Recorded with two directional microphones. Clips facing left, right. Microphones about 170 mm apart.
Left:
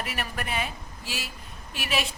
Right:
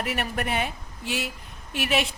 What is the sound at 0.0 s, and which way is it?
A woman's voice, 60° right (ahead or behind).